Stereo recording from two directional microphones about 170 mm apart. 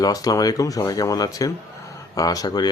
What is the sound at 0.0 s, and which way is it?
Speech, 20° left (ahead or behind).